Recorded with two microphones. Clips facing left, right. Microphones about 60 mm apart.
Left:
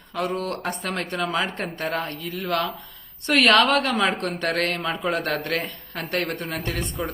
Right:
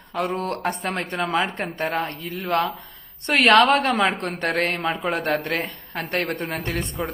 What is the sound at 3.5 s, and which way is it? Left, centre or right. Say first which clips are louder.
Speech: right 4 dB; right.